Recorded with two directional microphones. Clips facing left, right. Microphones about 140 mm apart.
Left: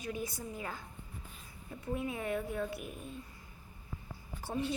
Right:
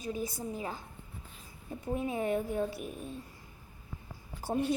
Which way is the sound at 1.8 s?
35° right (ahead or behind).